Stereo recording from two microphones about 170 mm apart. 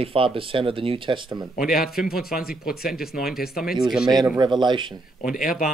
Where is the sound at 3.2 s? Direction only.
Centre (ahead or behind).